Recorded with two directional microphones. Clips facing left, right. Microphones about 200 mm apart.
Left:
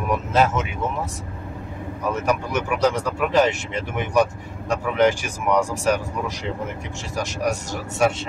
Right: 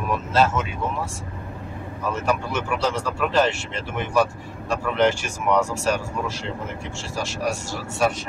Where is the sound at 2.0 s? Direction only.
15° left (ahead or behind).